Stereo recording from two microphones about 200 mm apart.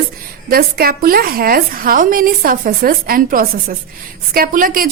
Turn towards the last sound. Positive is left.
turn(degrees=-45)  # may be behind; listen again after turning